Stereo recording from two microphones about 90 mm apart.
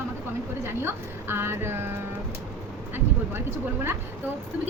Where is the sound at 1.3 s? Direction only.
25° right (ahead or behind).